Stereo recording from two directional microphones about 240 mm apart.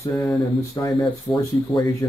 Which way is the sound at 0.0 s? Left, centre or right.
Centre.